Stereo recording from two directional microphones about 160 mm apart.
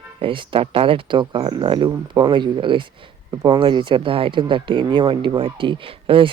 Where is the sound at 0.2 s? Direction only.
30° right (ahead or behind).